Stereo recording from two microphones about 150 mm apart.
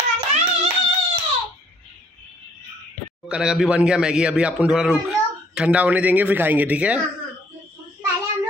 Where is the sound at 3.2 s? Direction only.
5° right (ahead or behind).